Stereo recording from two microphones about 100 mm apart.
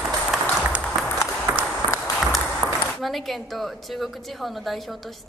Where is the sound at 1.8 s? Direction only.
55° right (ahead or behind).